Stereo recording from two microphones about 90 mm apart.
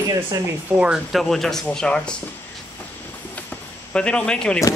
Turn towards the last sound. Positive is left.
turn(degrees=10)  # may be behind; listen again after turning